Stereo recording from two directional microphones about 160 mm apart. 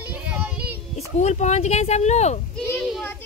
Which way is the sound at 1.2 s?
45° left (ahead or behind).